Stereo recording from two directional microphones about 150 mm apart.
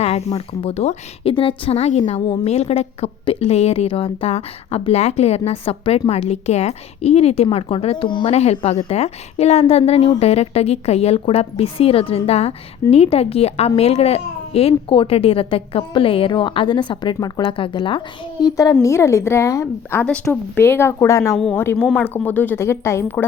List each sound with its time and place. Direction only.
0.0 s a woman's voice: 45° left (ahead or behind)
2.2 s a child's voice: 30° left (ahead or behind)
2.5 s a woman's voice: 45° left (ahead or behind); by 23.2 s 15° left (ahead or behind)